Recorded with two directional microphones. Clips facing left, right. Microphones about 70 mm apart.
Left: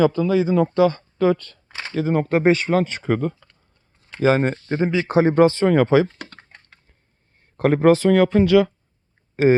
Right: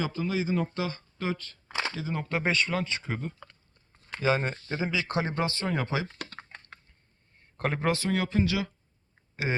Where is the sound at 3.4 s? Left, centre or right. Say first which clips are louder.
Right 6 dB; right.